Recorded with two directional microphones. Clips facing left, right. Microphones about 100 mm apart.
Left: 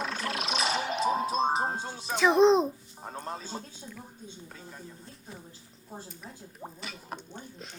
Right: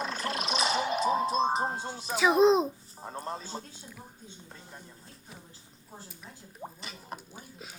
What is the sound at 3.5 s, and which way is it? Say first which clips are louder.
Speech: even; 5° right (ahead or behind).